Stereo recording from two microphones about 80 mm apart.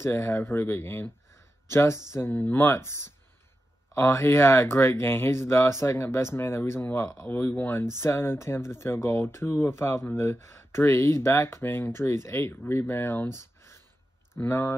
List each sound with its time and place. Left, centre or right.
0.0 s speech: left
2.3 s speech: left